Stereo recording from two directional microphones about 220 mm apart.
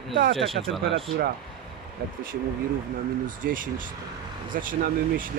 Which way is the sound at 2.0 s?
45° right (ahead or behind).